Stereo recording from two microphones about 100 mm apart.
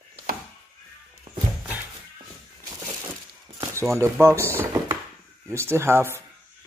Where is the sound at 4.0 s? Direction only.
25° right (ahead or behind).